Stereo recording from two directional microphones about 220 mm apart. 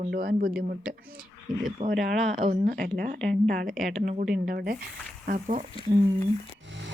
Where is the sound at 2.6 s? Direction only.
40° right (ahead or behind).